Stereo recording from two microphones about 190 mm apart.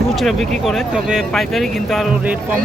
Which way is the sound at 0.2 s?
Centre (ahead or behind).